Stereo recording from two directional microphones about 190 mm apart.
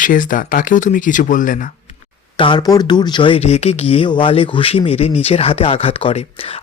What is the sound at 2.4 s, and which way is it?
Speech, 25° left (ahead or behind).